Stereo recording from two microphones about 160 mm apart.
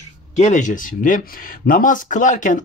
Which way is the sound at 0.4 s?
50° left (ahead or behind).